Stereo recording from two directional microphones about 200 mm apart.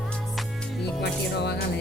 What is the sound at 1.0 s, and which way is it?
Speech, 55° left (ahead or behind).